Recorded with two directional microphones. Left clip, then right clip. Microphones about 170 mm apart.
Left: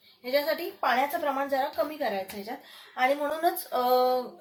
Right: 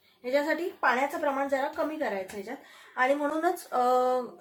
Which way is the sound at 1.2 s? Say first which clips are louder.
Even; 30° right (ahead or behind).